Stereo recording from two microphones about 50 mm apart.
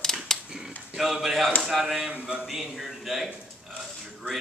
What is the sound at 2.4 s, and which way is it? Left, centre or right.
Speech, centre.